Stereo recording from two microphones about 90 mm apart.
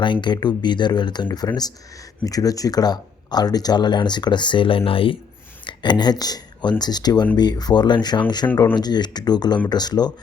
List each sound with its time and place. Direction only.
0.0 s speech: 60° left (ahead or behind); by 5.1 s 90° left
5.6 s speech: 55° left (ahead or behind)